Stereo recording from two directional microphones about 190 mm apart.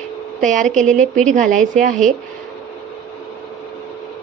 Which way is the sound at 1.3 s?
40° right (ahead or behind).